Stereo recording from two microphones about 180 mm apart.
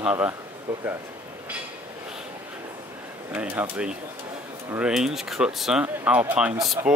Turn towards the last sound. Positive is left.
turn(degrees=0)  # may be behind; listen again after turning